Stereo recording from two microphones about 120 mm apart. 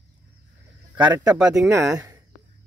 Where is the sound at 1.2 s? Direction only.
30° right (ahead or behind).